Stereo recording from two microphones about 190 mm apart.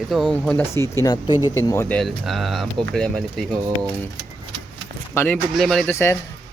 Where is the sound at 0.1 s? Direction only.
Centre (ahead or behind); by 2.0 s 15° left (ahead or behind).